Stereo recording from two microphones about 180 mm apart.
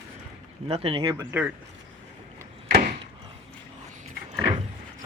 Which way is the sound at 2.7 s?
50° right (ahead or behind).